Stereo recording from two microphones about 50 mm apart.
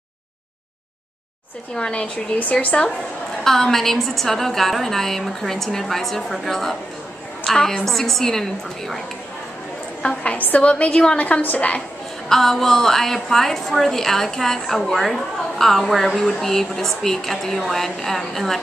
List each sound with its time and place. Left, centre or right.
1.8 s a woman's voice: centre
3.4 s a woman's voice: centre
10.0 s a woman's voice: left
11.4 s a woman's voice: left
12.3 s a woman's voice: centre